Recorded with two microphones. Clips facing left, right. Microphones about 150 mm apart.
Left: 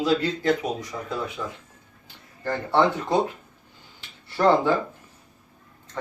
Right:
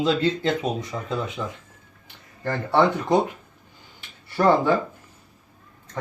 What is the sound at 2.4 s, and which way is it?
Speech, 15° right (ahead or behind).